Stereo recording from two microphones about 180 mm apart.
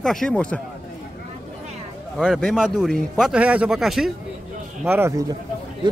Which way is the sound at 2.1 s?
Centre (ahead or behind).